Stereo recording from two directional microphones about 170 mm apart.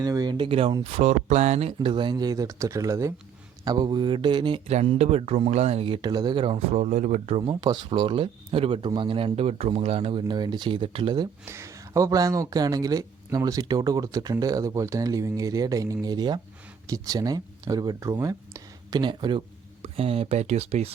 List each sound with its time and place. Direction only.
0.0 s speech: 20° right (ahead or behind); by 7.5 s 35° right (ahead or behind)
7.6 s speech: 25° right (ahead or behind)
11.4 s speech: 15° right (ahead or behind); by 20.9 s 40° right (ahead or behind)